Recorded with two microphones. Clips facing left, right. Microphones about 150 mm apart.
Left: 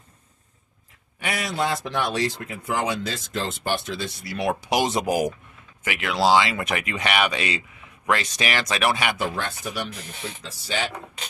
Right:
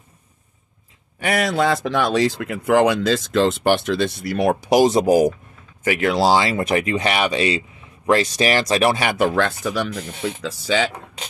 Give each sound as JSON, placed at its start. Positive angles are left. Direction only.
{"t": 1.4, "sound": "speech", "side_deg": -85}
{"t": 9.2, "sound": "speech", "side_deg": -85}